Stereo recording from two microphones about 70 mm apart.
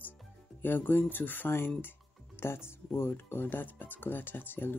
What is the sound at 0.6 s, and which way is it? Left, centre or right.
Speech, left.